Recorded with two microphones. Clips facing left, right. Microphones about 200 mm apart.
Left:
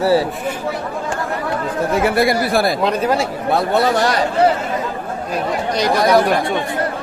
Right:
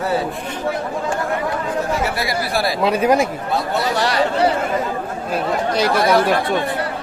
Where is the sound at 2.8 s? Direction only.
10° right (ahead or behind).